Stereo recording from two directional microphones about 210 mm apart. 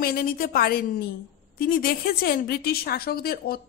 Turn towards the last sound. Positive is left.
turn(degrees=45)  # may be behind; listen again after turning